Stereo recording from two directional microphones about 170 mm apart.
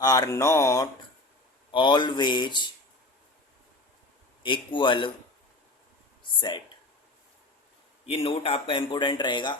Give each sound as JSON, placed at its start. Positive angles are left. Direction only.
{"t": 0.0, "sound": "speech", "side_deg": 20}
{"t": 4.4, "sound": "speech", "side_deg": 30}
{"t": 6.2, "sound": "a sound", "side_deg": 30}
{"t": 8.0, "sound": "speech", "side_deg": 35}